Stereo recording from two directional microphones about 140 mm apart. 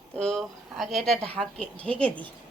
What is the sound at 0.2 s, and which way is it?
Speech, 5° left (ahead or behind).